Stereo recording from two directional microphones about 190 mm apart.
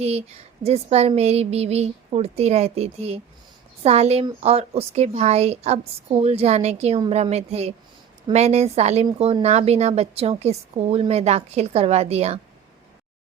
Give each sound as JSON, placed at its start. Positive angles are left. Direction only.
{"t": 0.0, "sound": "a woman's voice", "side_deg": -35}